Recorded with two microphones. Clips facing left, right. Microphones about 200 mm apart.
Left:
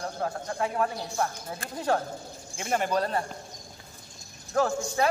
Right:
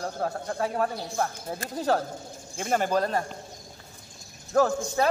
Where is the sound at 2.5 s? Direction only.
40° right (ahead or behind).